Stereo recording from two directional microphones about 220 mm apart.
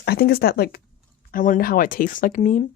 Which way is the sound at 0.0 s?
45° left (ahead or behind).